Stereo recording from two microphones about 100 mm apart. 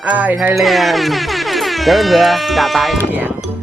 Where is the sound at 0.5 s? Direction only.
Centre (ahead or behind).